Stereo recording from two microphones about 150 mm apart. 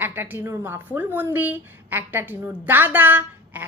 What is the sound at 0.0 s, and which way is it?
Speech, 15° right (ahead or behind).